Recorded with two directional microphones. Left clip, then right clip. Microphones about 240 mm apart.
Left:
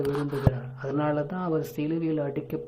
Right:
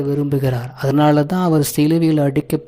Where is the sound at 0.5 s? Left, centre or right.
Right.